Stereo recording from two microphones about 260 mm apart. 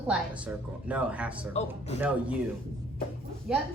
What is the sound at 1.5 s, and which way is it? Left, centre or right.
Speech, left.